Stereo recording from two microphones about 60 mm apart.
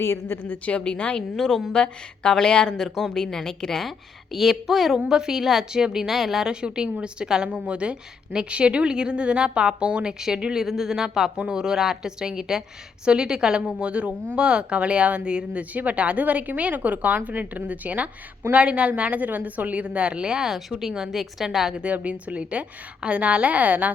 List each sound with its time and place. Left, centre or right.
0.0 s a woman's voice: left
0.4 s a woman's voice: left
1.4 s a woman's voice: centre
6.5 s a woman's voice: centre
21.8 s speech: right